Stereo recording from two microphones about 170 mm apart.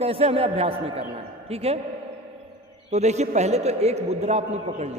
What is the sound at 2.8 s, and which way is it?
A woman's voice, 40° right (ahead or behind).